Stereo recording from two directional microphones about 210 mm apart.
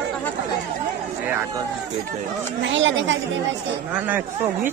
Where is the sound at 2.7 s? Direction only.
65° right (ahead or behind).